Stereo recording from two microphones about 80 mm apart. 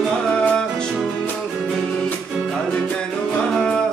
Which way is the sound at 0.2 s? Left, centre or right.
Centre.